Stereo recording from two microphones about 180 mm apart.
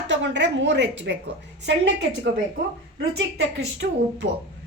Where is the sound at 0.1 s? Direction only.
85° right.